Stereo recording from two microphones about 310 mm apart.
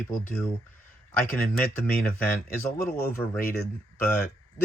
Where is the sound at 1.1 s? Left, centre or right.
Centre.